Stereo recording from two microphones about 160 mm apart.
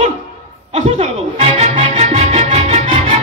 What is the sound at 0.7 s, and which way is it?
Music, 45° right (ahead or behind).